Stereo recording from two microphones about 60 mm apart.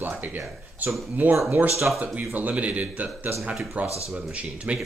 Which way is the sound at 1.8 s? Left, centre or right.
Right.